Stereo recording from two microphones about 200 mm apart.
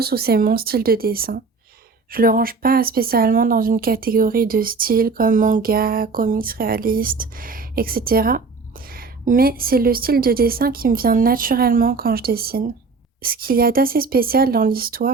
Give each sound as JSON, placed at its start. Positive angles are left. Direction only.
{"t": 0.0, "sound": "speech", "side_deg": -50}